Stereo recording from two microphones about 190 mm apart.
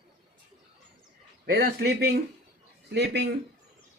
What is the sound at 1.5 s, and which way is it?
A man's voice, 55° right (ahead or behind).